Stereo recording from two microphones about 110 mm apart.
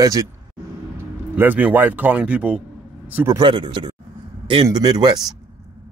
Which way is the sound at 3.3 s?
50° right (ahead or behind).